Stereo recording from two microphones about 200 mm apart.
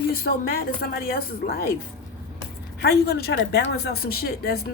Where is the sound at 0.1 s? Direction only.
45° left (ahead or behind).